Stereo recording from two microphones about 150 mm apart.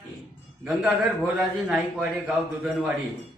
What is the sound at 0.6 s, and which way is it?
A man's voice, 5° right (ahead or behind).